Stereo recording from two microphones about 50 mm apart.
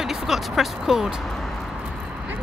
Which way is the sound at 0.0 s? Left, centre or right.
Centre.